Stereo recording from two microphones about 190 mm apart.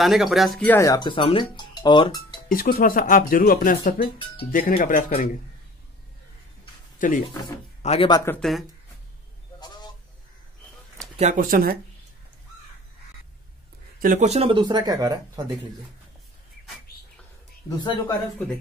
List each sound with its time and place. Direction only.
0.0 s speech: centre (ahead or behind); by 2.4 s 25° left (ahead or behind)
2.5 s speech: 45° left (ahead or behind)
4.0 s speech: 30° left (ahead or behind)
4.5 s speech: 45° left (ahead or behind)
7.0 s speech: 45° left (ahead or behind)
7.8 s speech: 30° left (ahead or behind)
8.4 s speech: centre (ahead or behind)
9.6 s a sound: 20° left (ahead or behind)
11.1 s speech: 40° right (ahead or behind)
13.9 s speech: 45° right (ahead or behind); by 15.4 s 20° right (ahead or behind)
17.6 s speech: 20° left (ahead or behind)